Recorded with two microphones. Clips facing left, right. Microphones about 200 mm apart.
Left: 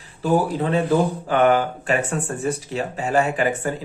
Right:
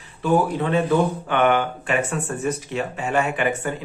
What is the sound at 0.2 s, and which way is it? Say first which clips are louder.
Speech: even; 35° left (ahead or behind).